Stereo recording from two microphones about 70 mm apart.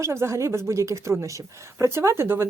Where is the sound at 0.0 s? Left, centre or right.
Right.